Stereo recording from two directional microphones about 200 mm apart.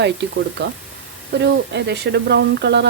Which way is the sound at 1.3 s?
55° right (ahead or behind).